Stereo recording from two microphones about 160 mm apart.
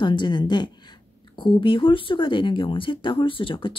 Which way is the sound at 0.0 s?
30° left (ahead or behind).